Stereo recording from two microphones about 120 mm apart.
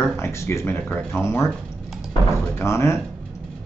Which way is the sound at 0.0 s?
20° left (ahead or behind).